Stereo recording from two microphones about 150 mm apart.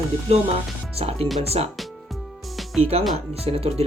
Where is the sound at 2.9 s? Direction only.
45° right (ahead or behind).